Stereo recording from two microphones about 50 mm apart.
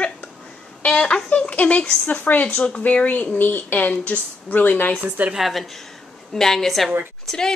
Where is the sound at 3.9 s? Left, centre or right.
Left.